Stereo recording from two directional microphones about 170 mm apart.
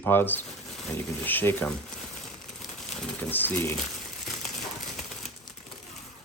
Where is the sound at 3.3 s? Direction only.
10° left (ahead or behind).